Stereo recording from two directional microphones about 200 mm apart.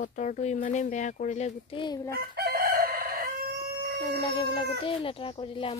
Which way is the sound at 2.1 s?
50° right (ahead or behind).